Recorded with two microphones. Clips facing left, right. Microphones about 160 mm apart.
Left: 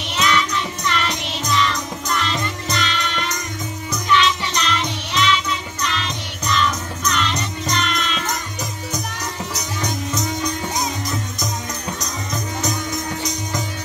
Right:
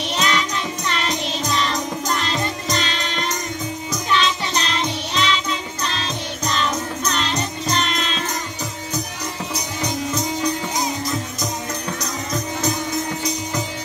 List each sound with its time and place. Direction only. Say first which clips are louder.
0.1 s music: left 3 dB; 35° right (ahead or behind)